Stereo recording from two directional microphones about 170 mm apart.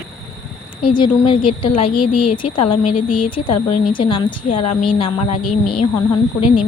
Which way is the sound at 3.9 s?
30° left (ahead or behind).